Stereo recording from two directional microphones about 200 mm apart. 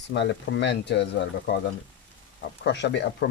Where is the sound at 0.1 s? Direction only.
60° left (ahead or behind).